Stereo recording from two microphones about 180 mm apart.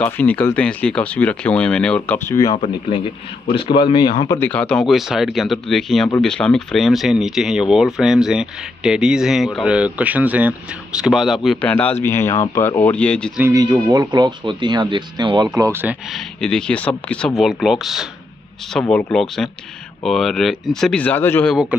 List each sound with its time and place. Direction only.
0.0 s speech: 5° left (ahead or behind)
2.5 s speech: 30° left (ahead or behind)
4.4 s speech: 10° left (ahead or behind)
11.7 s speech: 10° left (ahead or behind)
13.4 s speech: 15° right (ahead or behind)
16.3 s speech: 5° left (ahead or behind)